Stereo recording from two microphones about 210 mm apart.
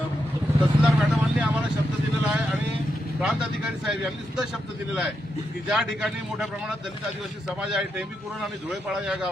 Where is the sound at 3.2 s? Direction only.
5° right (ahead or behind).